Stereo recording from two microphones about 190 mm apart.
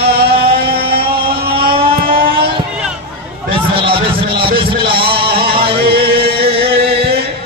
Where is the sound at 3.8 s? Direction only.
30° right (ahead or behind).